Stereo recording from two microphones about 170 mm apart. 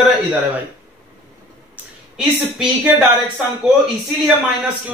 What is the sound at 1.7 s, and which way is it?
Speech, 5° right (ahead or behind).